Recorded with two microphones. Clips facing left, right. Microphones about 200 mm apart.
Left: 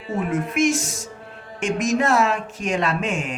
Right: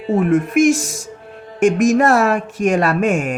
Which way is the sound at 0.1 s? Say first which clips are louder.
Right 9 dB; 55° right (ahead or behind).